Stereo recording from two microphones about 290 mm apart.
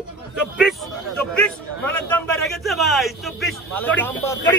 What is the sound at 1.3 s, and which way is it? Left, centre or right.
A man's voice, centre.